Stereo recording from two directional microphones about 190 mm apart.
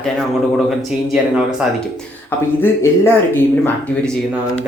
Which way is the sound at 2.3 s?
15° left (ahead or behind).